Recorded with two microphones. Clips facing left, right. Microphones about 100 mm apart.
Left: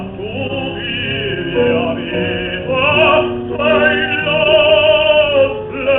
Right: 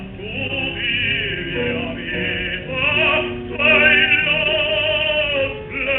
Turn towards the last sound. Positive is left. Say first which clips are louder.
# left 9 dB
turn(degrees=40)  # may be behind; listen again after turning